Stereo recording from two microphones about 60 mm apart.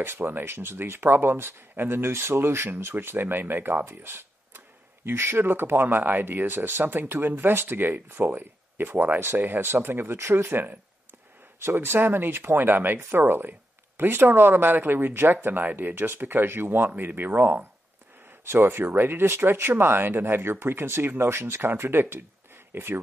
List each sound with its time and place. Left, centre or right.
0.0 s speech: right